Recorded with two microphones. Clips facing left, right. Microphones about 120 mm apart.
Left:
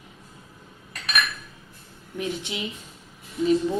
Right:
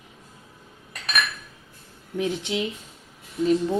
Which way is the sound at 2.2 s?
90° right.